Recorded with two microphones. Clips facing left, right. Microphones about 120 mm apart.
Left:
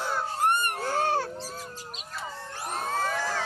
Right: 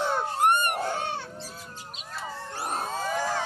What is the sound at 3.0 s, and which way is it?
Crowd, 15° right (ahead or behind).